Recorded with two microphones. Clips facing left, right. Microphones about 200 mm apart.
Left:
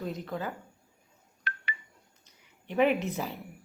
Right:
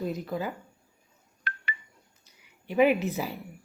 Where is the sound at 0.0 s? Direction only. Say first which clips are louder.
Right 3 dB; 10° right (ahead or behind).